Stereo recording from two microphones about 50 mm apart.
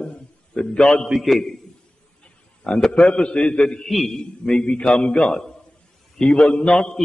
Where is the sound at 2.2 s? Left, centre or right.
Left.